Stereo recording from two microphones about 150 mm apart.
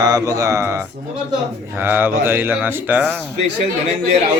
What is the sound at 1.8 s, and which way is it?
A man's voice, 15° right (ahead or behind).